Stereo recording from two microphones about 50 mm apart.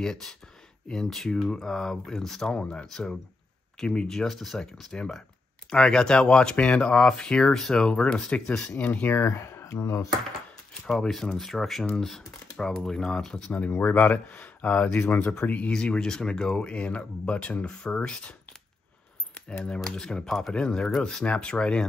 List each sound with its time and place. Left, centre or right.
0.0 s speech: centre
4.9 s speech: centre
7.5 s speech: centre
7.8 s speech: centre
9.2 s speech: left
9.7 s speech: left
10.9 s speech: centre
13.7 s speech: left
15.0 s speech: left
15.4 s speech: left
15.7 s speech: centre
19.6 s speech: centre